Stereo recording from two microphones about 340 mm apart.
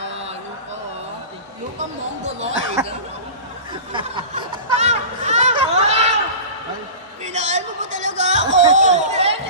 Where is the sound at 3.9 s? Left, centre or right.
Centre.